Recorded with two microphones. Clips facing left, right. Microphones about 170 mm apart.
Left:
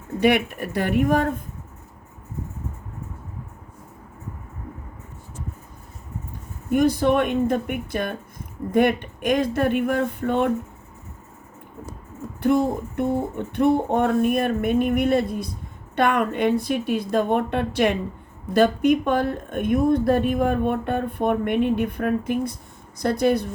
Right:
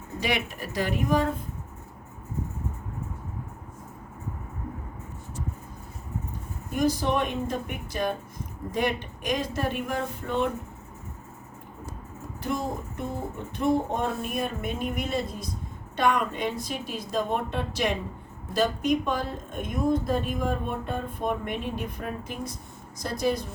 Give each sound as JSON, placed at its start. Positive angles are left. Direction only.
{"t": 0.2, "sound": "speech", "side_deg": 60}
{"t": 6.7, "sound": "speech", "side_deg": 60}
{"t": 12.4, "sound": "speech", "side_deg": 60}